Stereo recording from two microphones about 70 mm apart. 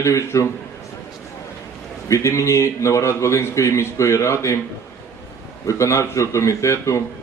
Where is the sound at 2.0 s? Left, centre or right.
Left.